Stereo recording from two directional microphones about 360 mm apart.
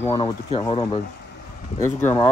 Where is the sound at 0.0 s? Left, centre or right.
Centre.